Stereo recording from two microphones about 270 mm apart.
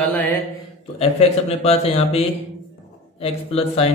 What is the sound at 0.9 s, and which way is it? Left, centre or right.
A man's voice, left.